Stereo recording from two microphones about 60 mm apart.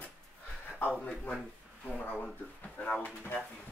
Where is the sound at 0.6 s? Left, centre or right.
Left.